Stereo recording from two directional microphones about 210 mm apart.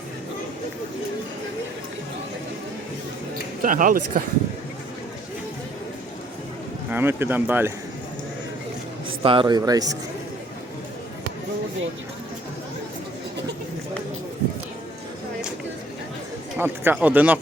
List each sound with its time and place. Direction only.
3.6 s speech: 40° right (ahead or behind)
6.9 s speech: 10° right (ahead or behind)
9.0 s a man's voice: 25° right (ahead or behind)
16.6 s speech: 10° right (ahead or behind)